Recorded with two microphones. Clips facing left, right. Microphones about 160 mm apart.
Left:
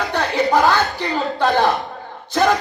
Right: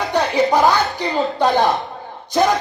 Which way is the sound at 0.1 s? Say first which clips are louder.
Right 2 dB; 15° right (ahead or behind).